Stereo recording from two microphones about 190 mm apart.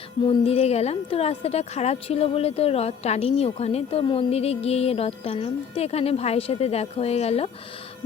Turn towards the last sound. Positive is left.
turn(degrees=35)  # may be behind; listen again after turning